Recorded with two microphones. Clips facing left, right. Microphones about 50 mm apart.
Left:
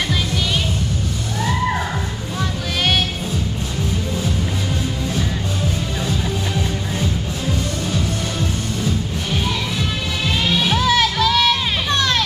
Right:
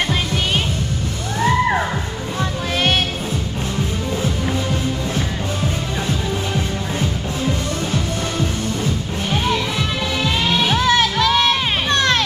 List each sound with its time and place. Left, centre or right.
10.7 s music: right